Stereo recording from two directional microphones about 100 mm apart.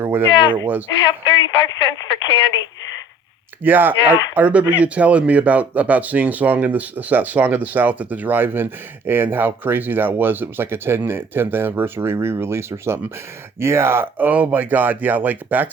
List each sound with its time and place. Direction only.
0.0 s a sound: 20° right (ahead or behind)
0.3 s speech: 50° left (ahead or behind)
0.6 s speech: 20° right (ahead or behind)
0.9 s speech: 45° left (ahead or behind)
3.6 s speech: 20° right (ahead or behind)